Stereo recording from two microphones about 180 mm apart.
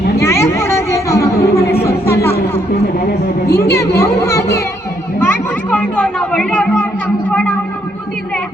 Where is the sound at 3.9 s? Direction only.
15° left (ahead or behind).